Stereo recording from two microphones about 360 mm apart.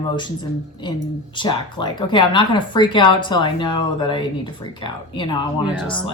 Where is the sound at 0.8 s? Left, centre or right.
Centre.